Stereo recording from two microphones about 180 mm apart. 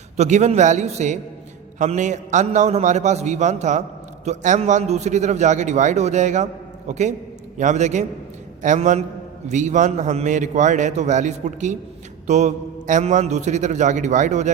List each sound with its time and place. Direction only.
0.2 s a man's voice: 40° right (ahead or behind)